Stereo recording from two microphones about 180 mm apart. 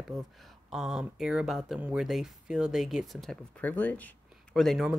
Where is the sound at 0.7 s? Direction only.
Centre (ahead or behind).